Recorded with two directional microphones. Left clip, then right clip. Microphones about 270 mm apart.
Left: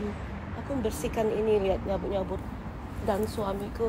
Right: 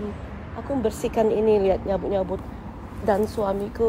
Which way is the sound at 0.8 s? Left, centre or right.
Right.